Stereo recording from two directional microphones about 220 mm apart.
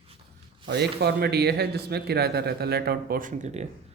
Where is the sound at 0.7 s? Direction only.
50° right (ahead or behind).